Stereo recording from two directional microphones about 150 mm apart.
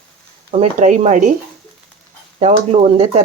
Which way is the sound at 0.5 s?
50° right (ahead or behind).